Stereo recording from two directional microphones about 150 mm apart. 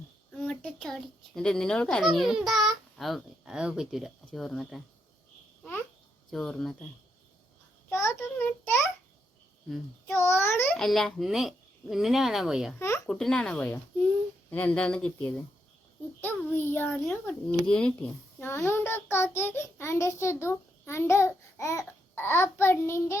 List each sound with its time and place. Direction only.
0.4 s a child's voice: 5° left (ahead or behind)
6.3 s a child's voice: 5° left (ahead or behind)
7.9 s a sound: 20° left (ahead or behind)
9.6 s a child's voice: centre (ahead or behind)
10.2 s a child's voice: 15° left (ahead or behind)
10.8 s a child's voice: centre (ahead or behind); by 23.1 s 15° left (ahead or behind)